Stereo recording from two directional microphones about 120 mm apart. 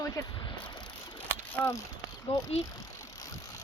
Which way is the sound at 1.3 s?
15° left (ahead or behind).